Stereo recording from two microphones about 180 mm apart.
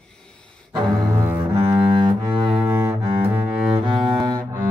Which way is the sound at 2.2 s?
25° right (ahead or behind).